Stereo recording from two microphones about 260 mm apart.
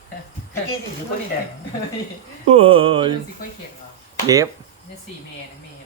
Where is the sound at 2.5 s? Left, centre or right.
Right.